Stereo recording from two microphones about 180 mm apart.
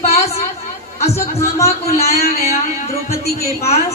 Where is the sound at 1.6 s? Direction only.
35° left (ahead or behind).